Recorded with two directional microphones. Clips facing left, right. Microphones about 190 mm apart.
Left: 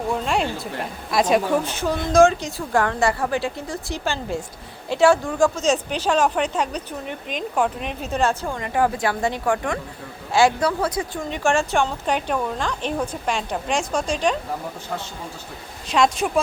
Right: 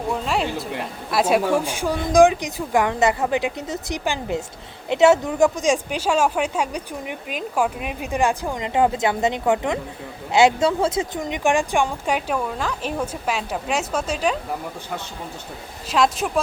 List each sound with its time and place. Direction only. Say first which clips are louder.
0.1 s a sound: even; centre (ahead or behind)
1.1 s speech: even; 5° right (ahead or behind)
15.9 s speech: left 1 dB; centre (ahead or behind)